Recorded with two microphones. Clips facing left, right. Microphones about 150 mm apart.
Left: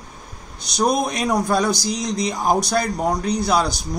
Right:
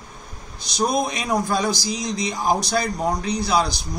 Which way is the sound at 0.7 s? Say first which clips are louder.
Left 2 dB; 60° left (ahead or behind).